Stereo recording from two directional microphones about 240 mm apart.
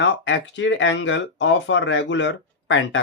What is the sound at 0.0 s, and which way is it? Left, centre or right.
Speech, left.